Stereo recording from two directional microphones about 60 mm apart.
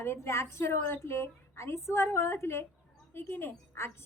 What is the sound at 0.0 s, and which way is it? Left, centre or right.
A woman's voice, left.